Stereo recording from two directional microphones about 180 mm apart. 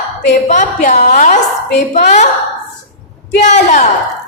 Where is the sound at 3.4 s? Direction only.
40° left (ahead or behind).